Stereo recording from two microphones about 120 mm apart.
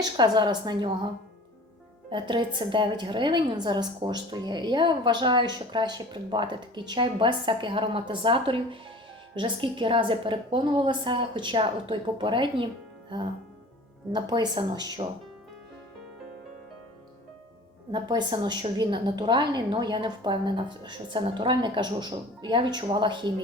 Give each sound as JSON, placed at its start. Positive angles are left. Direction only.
{"t": 0.0, "sound": "a woman's voice", "side_deg": -35}
{"t": 14.1, "sound": "a woman's voice", "side_deg": -40}
{"t": 17.9, "sound": "a woman's voice", "side_deg": -40}